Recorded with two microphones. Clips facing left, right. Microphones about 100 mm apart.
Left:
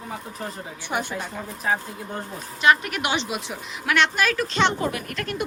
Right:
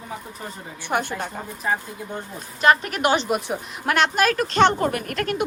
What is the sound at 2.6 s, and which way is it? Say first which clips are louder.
A woman's voice: right 2 dB; 40° right (ahead or behind).